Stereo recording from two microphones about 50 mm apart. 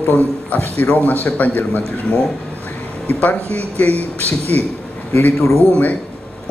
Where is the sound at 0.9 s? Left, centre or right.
Left.